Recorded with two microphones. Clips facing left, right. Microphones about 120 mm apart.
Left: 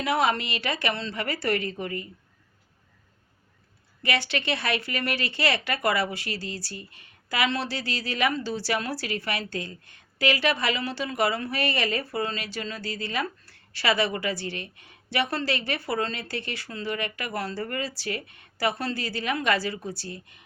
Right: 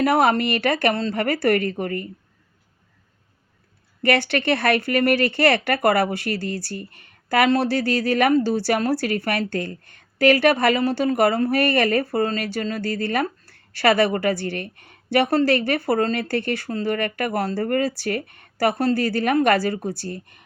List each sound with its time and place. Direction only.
0.0 s speech: 50° right (ahead or behind)
4.0 s speech: 55° right (ahead or behind)